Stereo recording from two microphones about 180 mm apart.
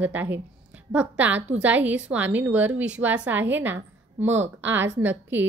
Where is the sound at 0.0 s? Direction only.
10° right (ahead or behind).